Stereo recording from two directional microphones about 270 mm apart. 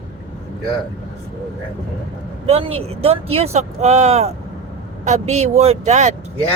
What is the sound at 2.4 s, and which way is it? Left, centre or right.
Speech, right.